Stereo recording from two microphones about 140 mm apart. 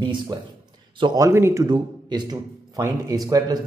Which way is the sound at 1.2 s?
20° right (ahead or behind).